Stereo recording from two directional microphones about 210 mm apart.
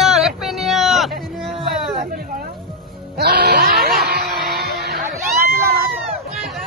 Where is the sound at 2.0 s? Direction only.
45° right (ahead or behind).